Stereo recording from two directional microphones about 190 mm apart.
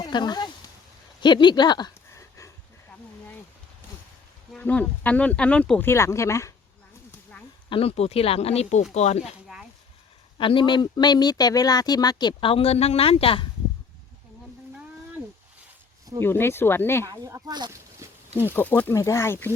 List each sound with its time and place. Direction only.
0.0 s speech: 20° left (ahead or behind)
1.2 s a sound: 25° left (ahead or behind)
4.5 s speech: 5° left (ahead or behind)
7.7 s speech: 30° left (ahead or behind)
10.3 s speech: 25° left (ahead or behind)
16.2 s speech: 10° left (ahead or behind)
17.1 s speech: 15° right (ahead or behind)
18.4 s speech: 10° left (ahead or behind)